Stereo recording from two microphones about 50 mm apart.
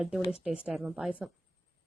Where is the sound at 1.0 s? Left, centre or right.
Right.